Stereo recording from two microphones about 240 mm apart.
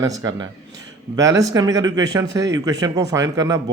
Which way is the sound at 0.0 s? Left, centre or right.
Centre.